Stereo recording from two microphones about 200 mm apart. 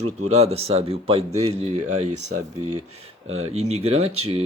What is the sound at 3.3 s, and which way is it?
Speech, 90° right.